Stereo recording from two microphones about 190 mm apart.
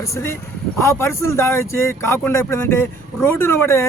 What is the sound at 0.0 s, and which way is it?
Speech, 15° left (ahead or behind).